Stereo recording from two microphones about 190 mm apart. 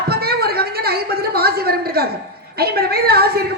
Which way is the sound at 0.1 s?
55° right (ahead or behind).